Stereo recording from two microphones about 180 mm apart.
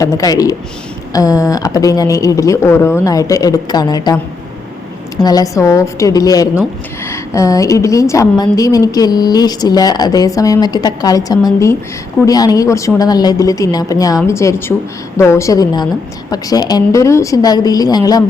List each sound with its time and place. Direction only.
0.0 s a woman's voice: 20° left (ahead or behind)
5.2 s a woman's voice: 20° left (ahead or behind)